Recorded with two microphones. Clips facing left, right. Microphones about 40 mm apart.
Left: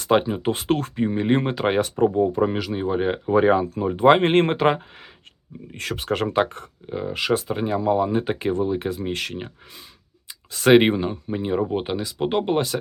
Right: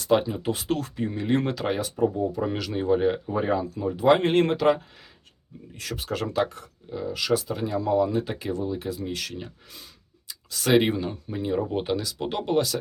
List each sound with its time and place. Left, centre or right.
0.0 s speech: left
1.6 s speech: left
2.7 s speech: left
3.2 s speech: left
3.6 s speech: left